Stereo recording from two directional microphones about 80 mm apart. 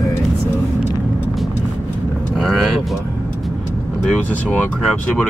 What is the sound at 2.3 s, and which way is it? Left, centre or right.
Speech, centre.